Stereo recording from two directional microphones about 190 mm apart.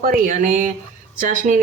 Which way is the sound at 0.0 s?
45° right (ahead or behind).